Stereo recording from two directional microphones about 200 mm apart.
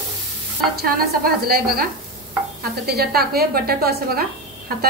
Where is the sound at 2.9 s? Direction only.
50° right (ahead or behind).